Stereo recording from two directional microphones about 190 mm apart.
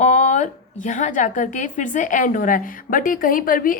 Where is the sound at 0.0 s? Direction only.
40° left (ahead or behind).